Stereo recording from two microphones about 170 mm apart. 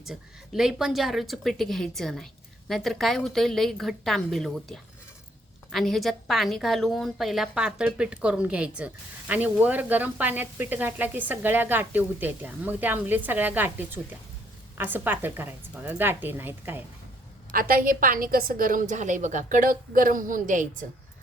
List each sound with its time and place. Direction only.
0.0 s a woman's voice: centre (ahead or behind)
17.5 s a woman's voice: 55° right (ahead or behind)